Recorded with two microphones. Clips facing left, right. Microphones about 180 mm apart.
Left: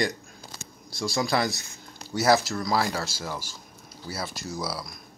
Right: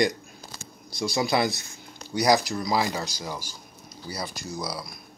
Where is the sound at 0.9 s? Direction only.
20° right (ahead or behind).